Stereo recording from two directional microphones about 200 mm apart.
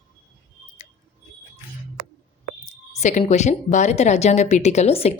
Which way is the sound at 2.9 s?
35° left (ahead or behind).